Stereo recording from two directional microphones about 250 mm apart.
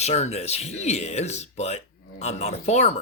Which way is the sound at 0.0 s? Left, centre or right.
Left.